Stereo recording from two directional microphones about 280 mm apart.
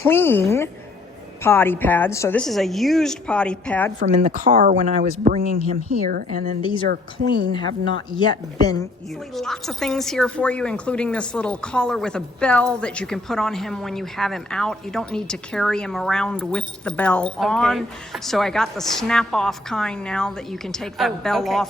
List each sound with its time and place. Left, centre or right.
0.0 s a woman's voice: centre
4.1 s a woman's voice: right
6.6 s a woman's voice: centre
8.2 s a woman's voice: centre
9.3 s a woman's voice: centre